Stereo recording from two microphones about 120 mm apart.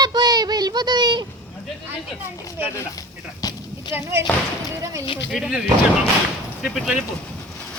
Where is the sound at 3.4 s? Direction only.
30° left (ahead or behind).